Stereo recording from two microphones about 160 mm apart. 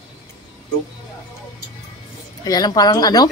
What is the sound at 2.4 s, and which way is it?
Speech, 25° left (ahead or behind).